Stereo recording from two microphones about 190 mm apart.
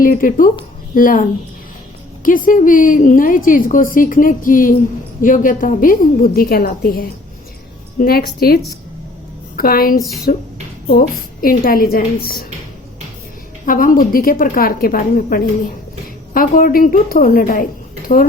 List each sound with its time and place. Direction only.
0.0 s a woman's voice: 45° left (ahead or behind)
13.7 s a woman's voice: 45° left (ahead or behind)